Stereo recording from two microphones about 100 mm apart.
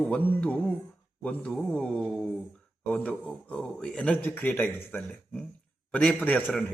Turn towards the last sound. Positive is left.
turn(degrees=15)  # may be behind; listen again after turning